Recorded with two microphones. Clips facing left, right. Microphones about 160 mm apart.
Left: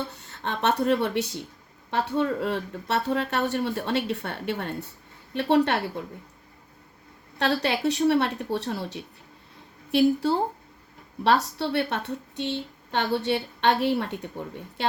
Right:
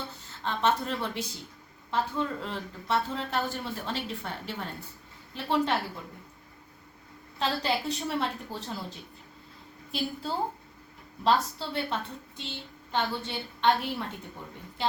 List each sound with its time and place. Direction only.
0.1 s a woman's voice: 70° left (ahead or behind)
7.3 s a woman's voice: 75° left (ahead or behind)